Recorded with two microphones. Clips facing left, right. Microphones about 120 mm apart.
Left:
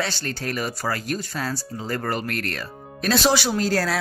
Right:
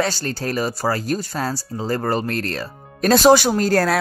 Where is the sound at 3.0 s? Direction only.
45° right (ahead or behind).